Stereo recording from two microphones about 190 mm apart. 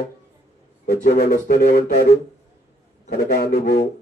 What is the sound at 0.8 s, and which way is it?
A man's voice, 55° left (ahead or behind).